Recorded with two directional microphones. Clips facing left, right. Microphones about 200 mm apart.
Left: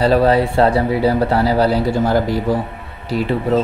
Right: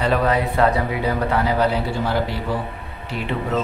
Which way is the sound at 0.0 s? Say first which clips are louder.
Left 6 dB; 30° left (ahead or behind).